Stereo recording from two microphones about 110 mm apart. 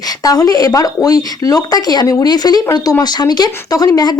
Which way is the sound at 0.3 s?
35° left (ahead or behind).